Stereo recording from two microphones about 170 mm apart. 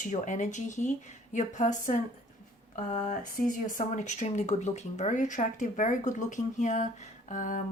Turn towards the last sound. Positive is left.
turn(degrees=50)  # may be behind; listen again after turning